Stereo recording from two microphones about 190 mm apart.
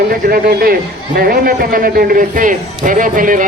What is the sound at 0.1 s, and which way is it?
A man's voice, 50° right (ahead or behind).